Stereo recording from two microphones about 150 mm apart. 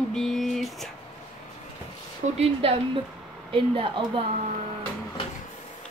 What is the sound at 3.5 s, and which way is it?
Speech, 35° right (ahead or behind).